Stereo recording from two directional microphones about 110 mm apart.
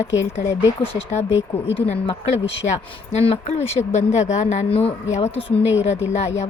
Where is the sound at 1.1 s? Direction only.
90° left.